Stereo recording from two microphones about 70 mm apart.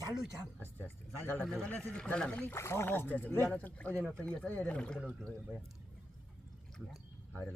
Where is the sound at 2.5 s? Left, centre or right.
Left.